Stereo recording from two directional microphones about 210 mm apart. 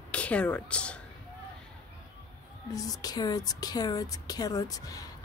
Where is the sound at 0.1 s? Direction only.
5° left (ahead or behind).